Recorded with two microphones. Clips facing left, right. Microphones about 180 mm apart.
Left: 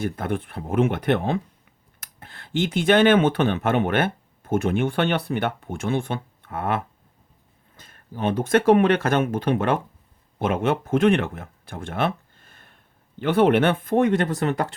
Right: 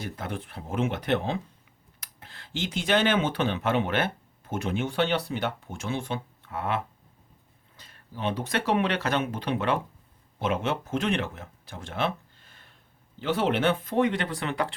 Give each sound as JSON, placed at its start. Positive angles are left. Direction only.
{"t": 0.0, "sound": "speech", "side_deg": 55}